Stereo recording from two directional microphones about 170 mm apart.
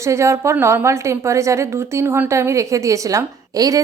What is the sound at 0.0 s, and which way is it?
A woman's voice, 15° right (ahead or behind).